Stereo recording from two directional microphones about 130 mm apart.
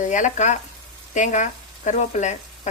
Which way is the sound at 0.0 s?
70° left (ahead or behind).